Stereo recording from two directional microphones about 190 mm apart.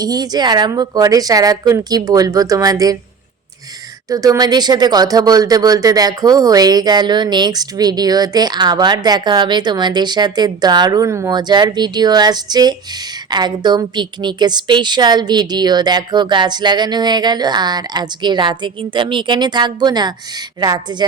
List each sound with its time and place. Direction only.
0.0 s speech: 20° right (ahead or behind)
4.1 s speech: 20° right (ahead or behind)